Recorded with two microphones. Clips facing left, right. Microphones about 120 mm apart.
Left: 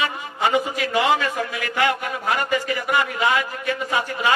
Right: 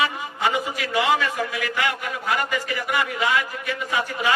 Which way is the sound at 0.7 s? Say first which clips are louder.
Left 2 dB; 30° left (ahead or behind).